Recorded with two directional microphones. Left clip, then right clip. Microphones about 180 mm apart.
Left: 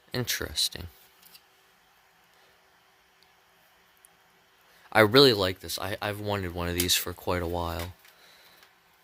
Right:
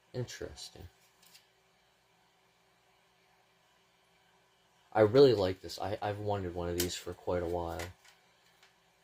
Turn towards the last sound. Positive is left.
turn(degrees=80)